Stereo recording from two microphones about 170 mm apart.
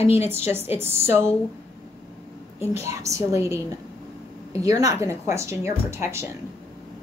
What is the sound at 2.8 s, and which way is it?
Speech, 20° right (ahead or behind).